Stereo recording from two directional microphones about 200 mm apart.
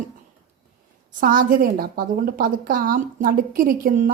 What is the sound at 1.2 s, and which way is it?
A woman's voice, 45° right (ahead or behind).